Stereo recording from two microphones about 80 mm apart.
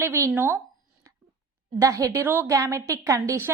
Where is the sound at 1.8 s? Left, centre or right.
Right.